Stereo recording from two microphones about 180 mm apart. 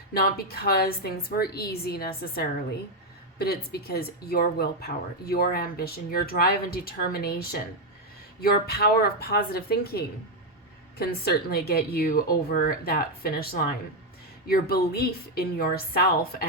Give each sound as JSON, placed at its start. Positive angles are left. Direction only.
{"t": 0.1, "sound": "speech", "side_deg": 60}